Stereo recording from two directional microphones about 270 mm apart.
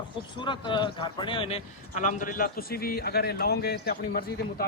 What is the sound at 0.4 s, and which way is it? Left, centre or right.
A man's voice, centre.